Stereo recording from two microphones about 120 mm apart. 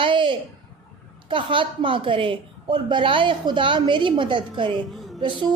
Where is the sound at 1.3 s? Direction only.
45° right (ahead or behind).